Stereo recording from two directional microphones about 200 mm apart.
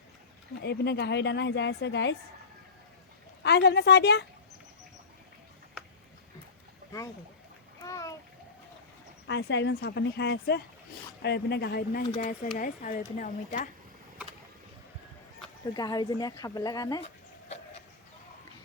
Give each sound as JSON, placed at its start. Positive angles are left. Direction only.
{"t": 0.6, "sound": "a woman's voice", "side_deg": 55}
{"t": 3.4, "sound": "a woman's voice", "side_deg": 55}
{"t": 7.8, "sound": "a sound", "side_deg": 15}
{"t": 9.2, "sound": "a woman's voice", "side_deg": 60}
{"t": 15.7, "sound": "speech", "side_deg": 20}